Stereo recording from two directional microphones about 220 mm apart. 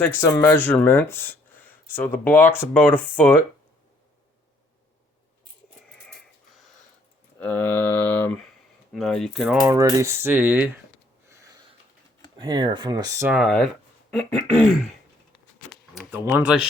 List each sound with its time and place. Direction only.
0.0 s speech: 10° left (ahead or behind)
7.3 s a sound: 10° left (ahead or behind)
8.9 s speech: centre (ahead or behind)
9.6 s speech: 15° right (ahead or behind)
12.4 s speech: 20° right (ahead or behind); by 14.8 s centre (ahead or behind)
16.0 s speech: 5° right (ahead or behind)